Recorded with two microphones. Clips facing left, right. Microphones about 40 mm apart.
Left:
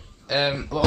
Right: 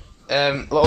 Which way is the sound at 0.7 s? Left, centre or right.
Right.